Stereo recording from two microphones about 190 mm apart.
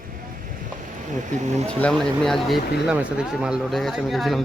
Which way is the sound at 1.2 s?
40° right (ahead or behind).